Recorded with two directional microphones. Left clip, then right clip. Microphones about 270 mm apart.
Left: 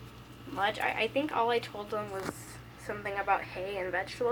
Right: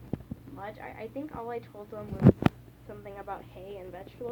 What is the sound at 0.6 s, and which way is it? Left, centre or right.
Speech, centre.